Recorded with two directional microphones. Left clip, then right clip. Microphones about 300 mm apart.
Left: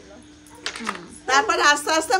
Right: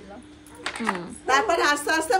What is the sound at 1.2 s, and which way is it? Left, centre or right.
Speech, centre.